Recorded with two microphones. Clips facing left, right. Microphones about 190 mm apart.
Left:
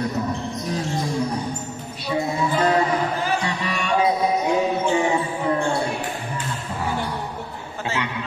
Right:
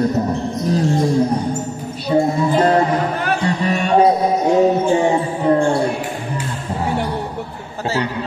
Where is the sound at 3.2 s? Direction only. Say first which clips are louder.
Right 4 dB; 60° right (ahead or behind).